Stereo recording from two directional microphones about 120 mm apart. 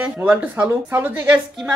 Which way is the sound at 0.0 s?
10° right (ahead or behind).